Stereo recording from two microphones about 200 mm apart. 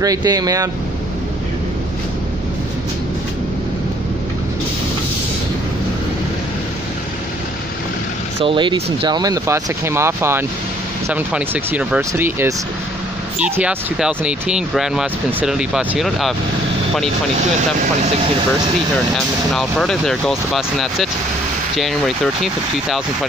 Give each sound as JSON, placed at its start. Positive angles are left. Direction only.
{"t": 0.0, "sound": "speech", "side_deg": -20}
{"t": 8.4, "sound": "speech", "side_deg": -25}
{"t": 19.1, "sound": "speech", "side_deg": 0}